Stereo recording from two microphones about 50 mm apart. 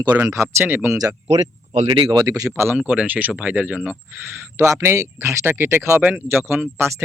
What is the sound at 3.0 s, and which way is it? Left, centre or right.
Speech, right.